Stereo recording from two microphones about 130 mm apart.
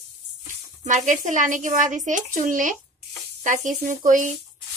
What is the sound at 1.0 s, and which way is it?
Speech, 75° right (ahead or behind).